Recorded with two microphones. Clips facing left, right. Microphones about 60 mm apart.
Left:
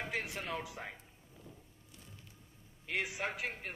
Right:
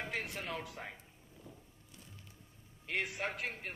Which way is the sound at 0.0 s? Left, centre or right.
Centre.